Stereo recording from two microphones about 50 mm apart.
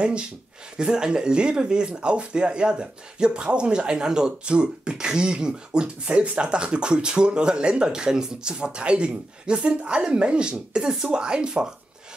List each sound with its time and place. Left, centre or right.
0.7 s speech: centre